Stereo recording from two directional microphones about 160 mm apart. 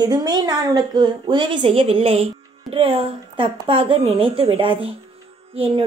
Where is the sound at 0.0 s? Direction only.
25° right (ahead or behind).